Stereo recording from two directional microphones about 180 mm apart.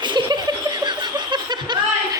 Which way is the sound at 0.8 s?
25° right (ahead or behind).